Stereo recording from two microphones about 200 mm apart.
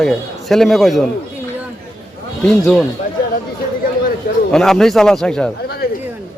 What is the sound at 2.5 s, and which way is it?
Speech, 5° left (ahead or behind).